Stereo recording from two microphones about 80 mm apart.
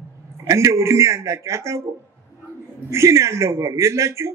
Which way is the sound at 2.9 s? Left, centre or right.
Right.